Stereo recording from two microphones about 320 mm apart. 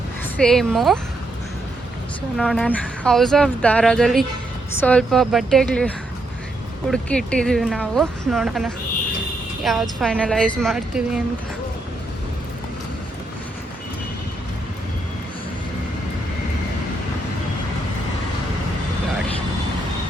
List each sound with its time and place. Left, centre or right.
0.3 s speech: centre
2.4 s speech: centre
6.9 s speech: centre